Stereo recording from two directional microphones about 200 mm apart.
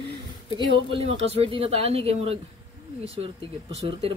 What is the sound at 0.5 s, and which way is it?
Speech, 25° right (ahead or behind).